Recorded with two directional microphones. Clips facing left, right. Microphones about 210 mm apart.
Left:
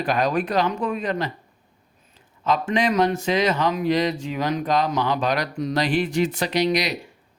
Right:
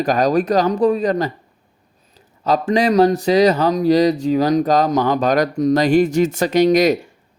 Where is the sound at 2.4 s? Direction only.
40° right (ahead or behind).